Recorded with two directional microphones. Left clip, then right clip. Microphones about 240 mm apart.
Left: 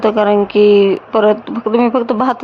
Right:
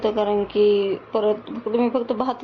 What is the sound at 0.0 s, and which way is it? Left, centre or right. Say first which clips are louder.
Speech: left 9 dB; centre.